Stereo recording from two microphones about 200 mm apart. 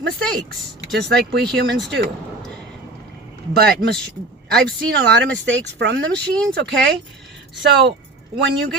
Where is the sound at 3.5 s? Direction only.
55° right (ahead or behind).